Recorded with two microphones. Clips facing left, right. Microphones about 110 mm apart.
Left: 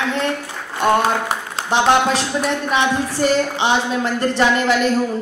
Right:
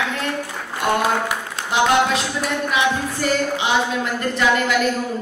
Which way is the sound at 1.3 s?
30° left (ahead or behind).